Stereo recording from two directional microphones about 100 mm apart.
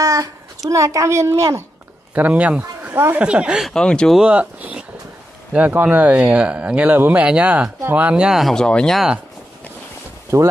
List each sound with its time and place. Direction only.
0.0 s a sound: 35° right (ahead or behind)
0.7 s a child's voice: 35° right (ahead or behind)
2.1 s speech: 15° right (ahead or behind)
3.7 s speech: 10° left (ahead or behind)
4.2 s speech: 10° right (ahead or behind); by 9.0 s 5° left (ahead or behind)
10.3 s a child's voice: 30° right (ahead or behind)